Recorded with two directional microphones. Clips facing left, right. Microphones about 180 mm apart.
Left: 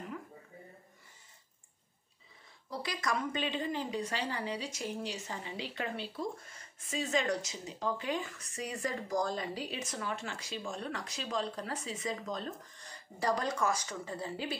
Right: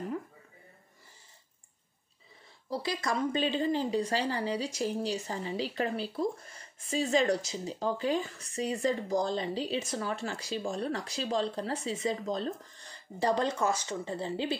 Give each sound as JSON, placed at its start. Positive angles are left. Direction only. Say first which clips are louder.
{"t": 2.7, "sound": "a woman's voice", "louder": "right 4 dB", "side_deg": -30}